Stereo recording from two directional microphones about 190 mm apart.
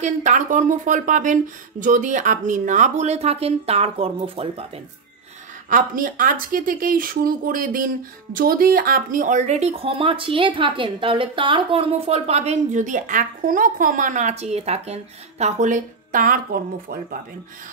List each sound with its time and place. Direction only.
0.0 s speech: 40° right (ahead or behind)
5.7 s speech: 45° right (ahead or behind)